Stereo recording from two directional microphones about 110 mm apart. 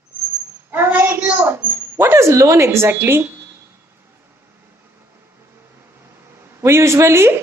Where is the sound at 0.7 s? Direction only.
20° right (ahead or behind).